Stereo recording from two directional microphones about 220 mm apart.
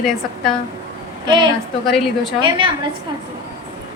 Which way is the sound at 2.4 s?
20° right (ahead or behind).